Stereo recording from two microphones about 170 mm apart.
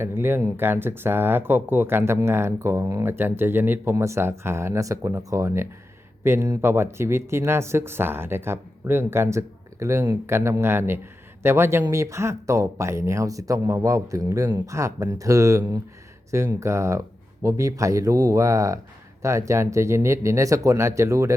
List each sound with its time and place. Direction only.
0.0 s speech: 15° right (ahead or behind)